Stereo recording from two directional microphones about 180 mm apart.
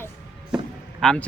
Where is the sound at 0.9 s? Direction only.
5° left (ahead or behind).